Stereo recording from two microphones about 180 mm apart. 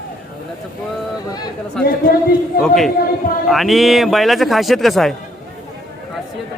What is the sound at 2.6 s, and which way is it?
Speech, centre (ahead or behind).